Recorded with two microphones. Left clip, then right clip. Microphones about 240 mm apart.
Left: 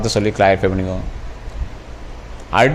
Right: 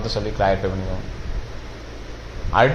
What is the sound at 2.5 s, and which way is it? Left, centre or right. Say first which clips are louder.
Speech: left 3 dB; left.